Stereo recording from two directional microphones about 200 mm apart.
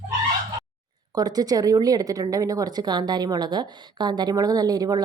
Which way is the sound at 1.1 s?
20° right (ahead or behind).